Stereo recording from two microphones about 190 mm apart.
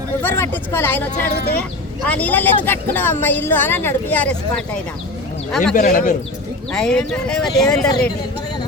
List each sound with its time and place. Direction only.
0.2 s a woman's voice: 10° left (ahead or behind)
5.7 s a man's voice: 45° left (ahead or behind)
6.7 s speech: 5° left (ahead or behind)